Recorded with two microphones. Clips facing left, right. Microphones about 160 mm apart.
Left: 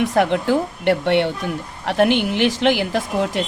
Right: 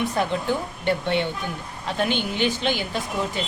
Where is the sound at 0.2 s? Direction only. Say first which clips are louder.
Left 9 dB; 75° left (ahead or behind).